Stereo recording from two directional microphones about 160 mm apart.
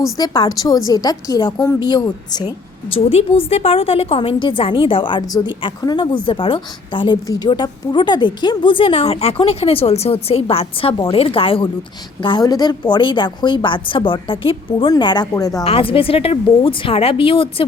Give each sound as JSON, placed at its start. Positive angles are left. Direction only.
{"t": 0.2, "sound": "a woman's voice", "side_deg": 25}
{"t": 2.9, "sound": "a woman's voice", "side_deg": 35}
{"t": 15.6, "sound": "a woman's voice", "side_deg": 35}